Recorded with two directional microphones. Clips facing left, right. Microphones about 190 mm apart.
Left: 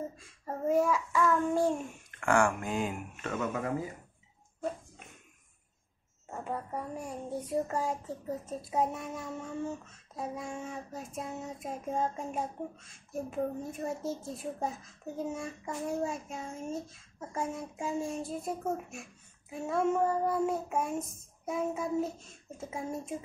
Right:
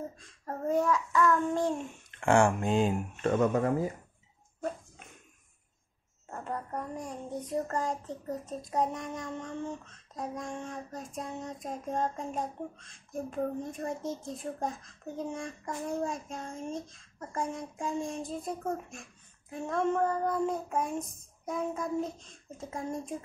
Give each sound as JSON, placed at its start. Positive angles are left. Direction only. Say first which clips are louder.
{"t": 0.2, "sound": "child singing", "louder": "left 1 dB", "side_deg": 5}
{"t": 2.0, "sound": "speech", "louder": "right 3 dB", "side_deg": -25}
{"t": 3.3, "sound": "speech", "louder": "right 7 dB", "side_deg": -45}
{"t": 6.3, "sound": "speech", "louder": "even", "side_deg": 5}
{"t": 19.5, "sound": "child singing", "louder": "even", "side_deg": 10}
{"t": 21.5, "sound": "speech", "louder": "left 1 dB", "side_deg": 5}